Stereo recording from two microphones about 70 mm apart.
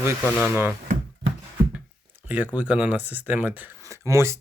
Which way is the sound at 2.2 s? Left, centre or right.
Right.